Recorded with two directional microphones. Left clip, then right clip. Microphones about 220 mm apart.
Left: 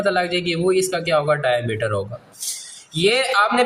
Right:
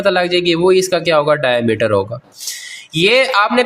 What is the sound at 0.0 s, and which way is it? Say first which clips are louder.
A man's voice: right 6 dB; 40° right (ahead or behind).